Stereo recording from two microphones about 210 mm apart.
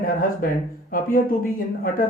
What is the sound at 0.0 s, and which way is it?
Speech, 40° left (ahead or behind).